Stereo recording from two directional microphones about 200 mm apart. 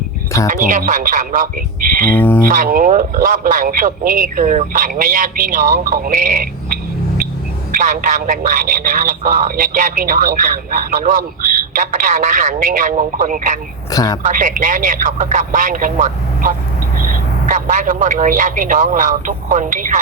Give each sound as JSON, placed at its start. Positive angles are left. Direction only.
{"t": 0.4, "sound": "speech", "side_deg": -40}
{"t": 2.1, "sound": "speech", "side_deg": 10}
{"t": 2.4, "sound": "speech", "side_deg": -45}
{"t": 7.7, "sound": "speech", "side_deg": -40}
{"t": 13.9, "sound": "a woman's voice", "side_deg": 20}
{"t": 14.3, "sound": "speech", "side_deg": -40}